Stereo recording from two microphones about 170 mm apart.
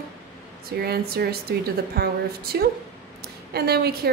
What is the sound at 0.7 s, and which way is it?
A woman's voice, 65° right (ahead or behind).